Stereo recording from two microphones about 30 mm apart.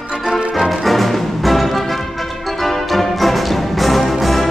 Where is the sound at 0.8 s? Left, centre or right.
Centre.